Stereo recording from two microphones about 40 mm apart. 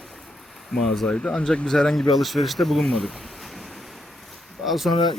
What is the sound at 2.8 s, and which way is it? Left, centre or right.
Speech, centre.